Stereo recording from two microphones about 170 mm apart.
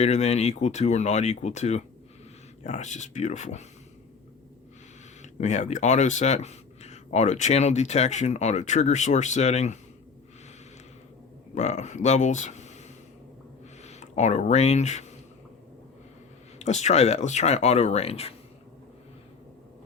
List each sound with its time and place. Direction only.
0.0 s speech: 40° left (ahead or behind)
5.2 s speech: 40° left (ahead or behind)
11.5 s speech: 40° left (ahead or behind)
13.8 s speech: 40° left (ahead or behind)
16.6 s speech: 40° left (ahead or behind)